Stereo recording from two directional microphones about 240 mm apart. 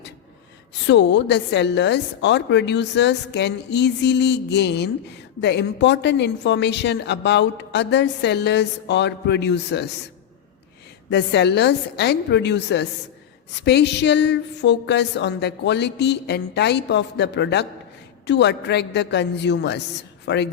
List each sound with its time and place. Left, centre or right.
0.9 s a woman's voice: left
11.1 s a woman's voice: left